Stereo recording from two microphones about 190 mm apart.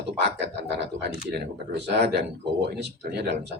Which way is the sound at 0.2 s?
65° right (ahead or behind).